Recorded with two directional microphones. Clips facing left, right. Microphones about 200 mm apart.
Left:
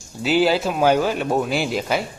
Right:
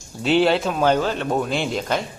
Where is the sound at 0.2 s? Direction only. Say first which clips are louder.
Even; 5° left (ahead or behind).